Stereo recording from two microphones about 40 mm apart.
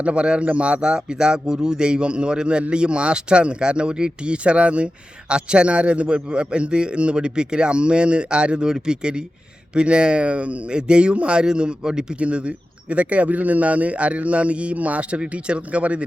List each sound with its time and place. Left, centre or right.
0.0 s a man's voice: right
12.2 s speech: right